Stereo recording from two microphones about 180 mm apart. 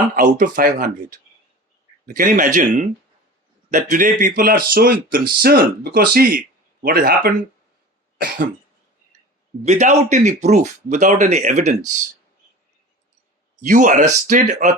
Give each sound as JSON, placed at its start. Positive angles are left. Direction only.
{"t": 0.2, "sound": "speech", "side_deg": -50}
{"t": 2.0, "sound": "speech", "side_deg": -50}
{"t": 9.6, "sound": "speech", "side_deg": -40}
{"t": 13.6, "sound": "speech", "side_deg": -45}